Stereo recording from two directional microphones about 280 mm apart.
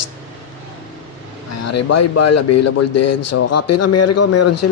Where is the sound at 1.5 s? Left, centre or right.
Left.